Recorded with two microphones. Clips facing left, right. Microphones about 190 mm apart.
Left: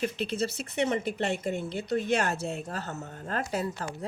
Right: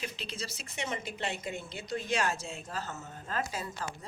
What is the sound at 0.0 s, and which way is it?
A woman's voice, 55° left (ahead or behind).